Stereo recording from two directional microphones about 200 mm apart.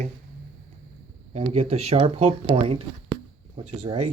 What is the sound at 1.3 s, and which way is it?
Speech, 30° right (ahead or behind).